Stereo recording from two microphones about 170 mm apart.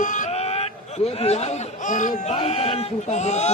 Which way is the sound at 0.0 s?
50° left (ahead or behind).